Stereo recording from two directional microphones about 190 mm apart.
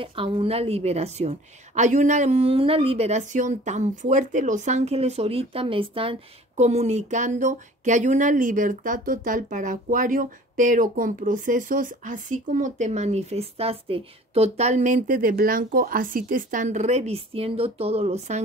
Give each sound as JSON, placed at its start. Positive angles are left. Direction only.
{"t": 0.0, "sound": "a woman's voice", "side_deg": -30}